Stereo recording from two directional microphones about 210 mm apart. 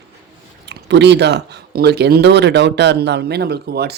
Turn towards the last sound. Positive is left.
turn(degrees=-50)  # may be behind; listen again after turning